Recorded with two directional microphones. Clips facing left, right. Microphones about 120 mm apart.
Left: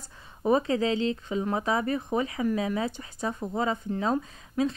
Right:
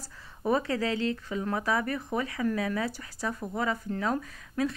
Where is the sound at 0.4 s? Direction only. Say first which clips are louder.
Left 3 dB; 20° left (ahead or behind).